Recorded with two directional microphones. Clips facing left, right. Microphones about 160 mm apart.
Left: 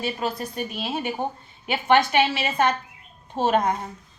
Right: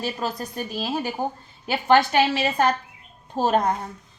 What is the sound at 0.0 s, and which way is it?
A woman's voice, 40° right (ahead or behind).